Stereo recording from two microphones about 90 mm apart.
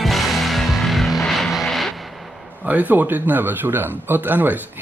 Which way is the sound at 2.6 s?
15° right (ahead or behind).